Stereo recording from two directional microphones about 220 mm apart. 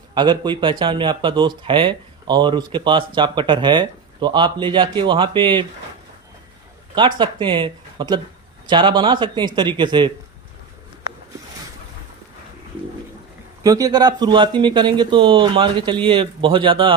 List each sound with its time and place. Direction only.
0.1 s speech: 20° right (ahead or behind)
7.2 s speech: 20° right (ahead or behind)
13.6 s speech: 15° right (ahead or behind)